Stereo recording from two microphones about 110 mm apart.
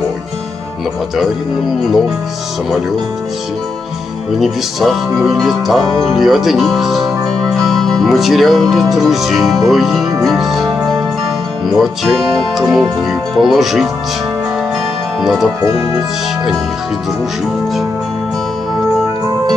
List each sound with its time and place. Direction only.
1.1 s speech: centre (ahead or behind)
4.4 s music: centre (ahead or behind)
11.7 s speech: centre (ahead or behind)
15.2 s speech: centre (ahead or behind)